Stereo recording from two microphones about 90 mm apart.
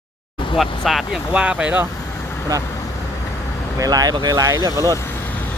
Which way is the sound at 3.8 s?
45° right (ahead or behind).